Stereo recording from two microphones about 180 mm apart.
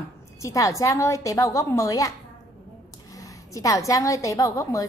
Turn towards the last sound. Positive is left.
turn(degrees=20)  # may be behind; listen again after turning